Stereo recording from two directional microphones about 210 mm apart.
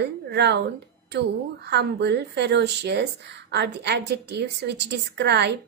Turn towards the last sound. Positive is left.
turn(degrees=-55)  # may be behind; listen again after turning